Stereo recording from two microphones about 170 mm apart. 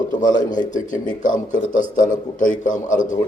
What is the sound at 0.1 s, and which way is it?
Speech, 50° left (ahead or behind).